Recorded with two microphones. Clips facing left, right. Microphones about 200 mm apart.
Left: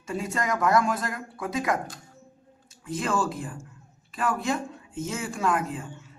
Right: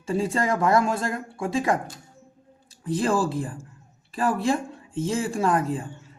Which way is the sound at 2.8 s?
35° right (ahead or behind).